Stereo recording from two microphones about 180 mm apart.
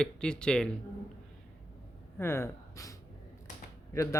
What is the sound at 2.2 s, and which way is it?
Speech, 15° left (ahead or behind).